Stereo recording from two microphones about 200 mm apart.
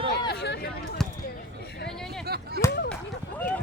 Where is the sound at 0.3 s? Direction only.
55° left (ahead or behind).